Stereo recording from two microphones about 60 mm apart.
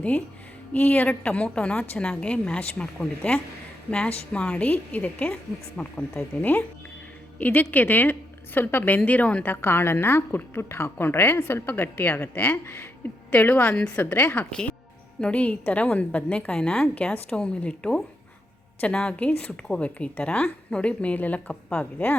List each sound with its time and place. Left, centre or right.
0.7 s a woman's voice: left
9.5 s a woman's voice: left
14.5 s a woman's voice: centre
16.6 s a woman's voice: centre; by 22.1 s left